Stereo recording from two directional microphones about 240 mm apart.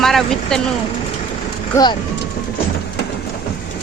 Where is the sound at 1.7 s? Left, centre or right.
Centre.